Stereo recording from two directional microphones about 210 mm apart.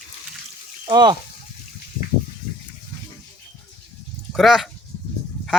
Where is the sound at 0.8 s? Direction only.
20° right (ahead or behind).